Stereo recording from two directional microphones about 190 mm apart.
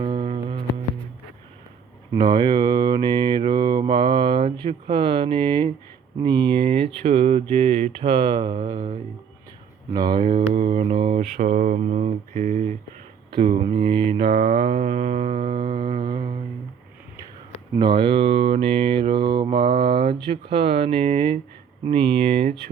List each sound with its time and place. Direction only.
0.0 s music: 30° right (ahead or behind)
2.1 s mantra: 25° right (ahead or behind)
11.3 s mantra: 45° right (ahead or behind)
13.3 s mantra: 25° right (ahead or behind)
17.7 s mantra: 25° right (ahead or behind)